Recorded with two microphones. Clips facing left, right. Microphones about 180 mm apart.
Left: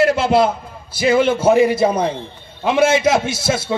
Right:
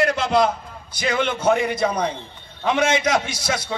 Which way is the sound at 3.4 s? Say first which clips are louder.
Left 6 dB; 25° left (ahead or behind).